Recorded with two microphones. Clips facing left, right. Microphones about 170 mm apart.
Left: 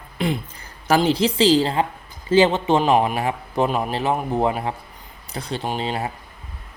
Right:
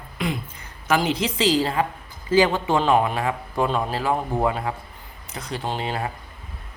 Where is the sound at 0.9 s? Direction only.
30° left (ahead or behind).